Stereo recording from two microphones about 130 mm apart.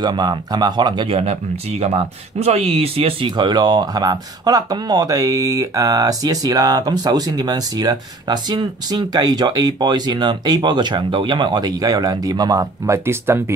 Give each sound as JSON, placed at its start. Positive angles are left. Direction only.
{"t": 0.0, "sound": "speech", "side_deg": -35}